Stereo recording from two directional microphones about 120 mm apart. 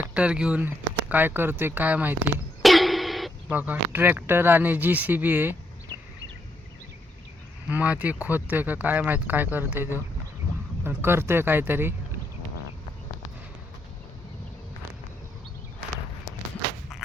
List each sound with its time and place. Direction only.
0.1 s speech: 10° right (ahead or behind)
2.6 s a sound: centre (ahead or behind)
3.5 s speech: 15° right (ahead or behind)
7.7 s speech: 15° right (ahead or behind)